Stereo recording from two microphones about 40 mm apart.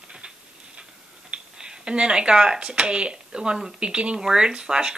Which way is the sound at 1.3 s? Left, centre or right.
Right.